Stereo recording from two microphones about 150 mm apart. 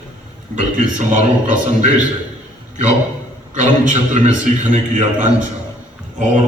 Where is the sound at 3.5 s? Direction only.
55° right (ahead or behind).